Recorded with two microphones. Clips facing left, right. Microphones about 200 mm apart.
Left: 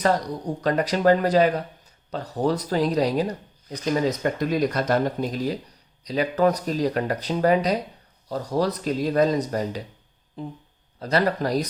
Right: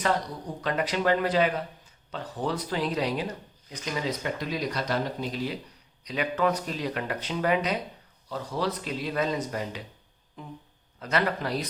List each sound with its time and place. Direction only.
0.6 s speech: 40° left (ahead or behind)